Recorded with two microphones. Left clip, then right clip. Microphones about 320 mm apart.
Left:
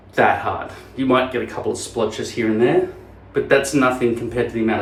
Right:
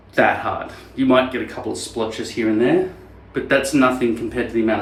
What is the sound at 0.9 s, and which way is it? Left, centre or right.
Speech, centre.